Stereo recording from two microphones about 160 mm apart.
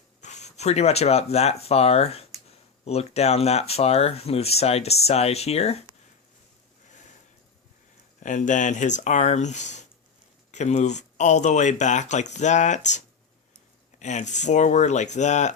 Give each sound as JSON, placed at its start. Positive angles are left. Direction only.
{"t": 0.2, "sound": "speech", "side_deg": 45}
{"t": 8.2, "sound": "speech", "side_deg": 50}
{"t": 14.0, "sound": "speech", "side_deg": 50}